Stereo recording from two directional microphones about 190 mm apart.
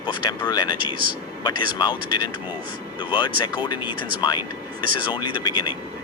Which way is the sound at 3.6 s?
20° left (ahead or behind).